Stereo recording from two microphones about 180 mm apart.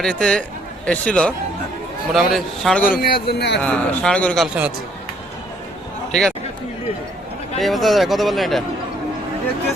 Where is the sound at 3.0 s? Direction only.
60° left (ahead or behind).